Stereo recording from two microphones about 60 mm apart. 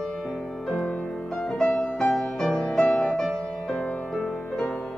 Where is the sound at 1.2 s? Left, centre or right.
Centre.